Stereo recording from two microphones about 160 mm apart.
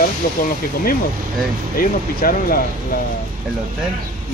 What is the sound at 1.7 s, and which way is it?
Speech, 65° left (ahead or behind).